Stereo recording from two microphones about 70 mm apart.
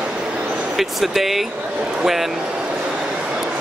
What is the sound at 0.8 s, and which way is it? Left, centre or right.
Speech, centre.